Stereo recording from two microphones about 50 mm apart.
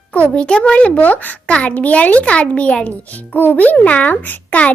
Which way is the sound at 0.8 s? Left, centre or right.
Left.